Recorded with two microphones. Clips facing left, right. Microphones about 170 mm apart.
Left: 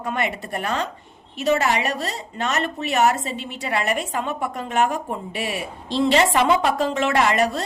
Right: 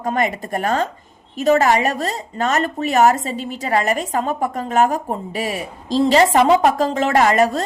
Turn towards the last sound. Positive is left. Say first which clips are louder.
# right 5 dB
turn(degrees=-45)  # may be behind; listen again after turning